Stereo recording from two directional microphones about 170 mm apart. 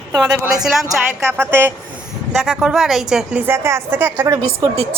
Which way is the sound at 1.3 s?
15° right (ahead or behind).